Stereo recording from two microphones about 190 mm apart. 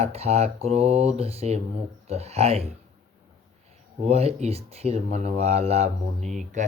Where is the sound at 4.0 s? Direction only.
35° right (ahead or behind).